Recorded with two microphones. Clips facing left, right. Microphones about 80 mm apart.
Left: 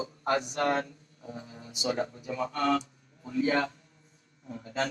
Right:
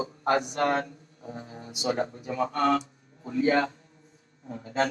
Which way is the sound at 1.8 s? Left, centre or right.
Right.